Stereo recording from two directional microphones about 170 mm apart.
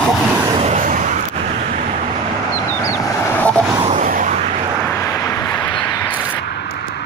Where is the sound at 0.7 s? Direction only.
45° right (ahead or behind).